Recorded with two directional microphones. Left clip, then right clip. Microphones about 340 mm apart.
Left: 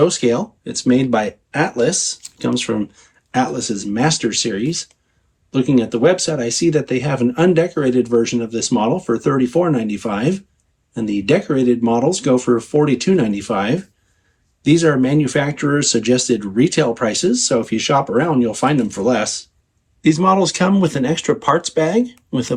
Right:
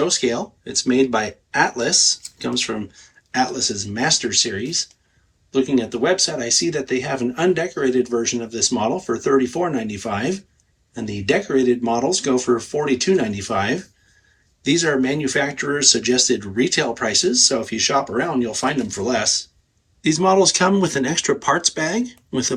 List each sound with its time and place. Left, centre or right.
0.0 s speech: centre